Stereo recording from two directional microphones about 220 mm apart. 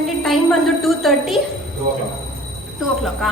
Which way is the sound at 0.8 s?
Centre (ahead or behind).